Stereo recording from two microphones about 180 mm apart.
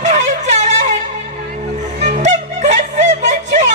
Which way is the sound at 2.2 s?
40° right (ahead or behind).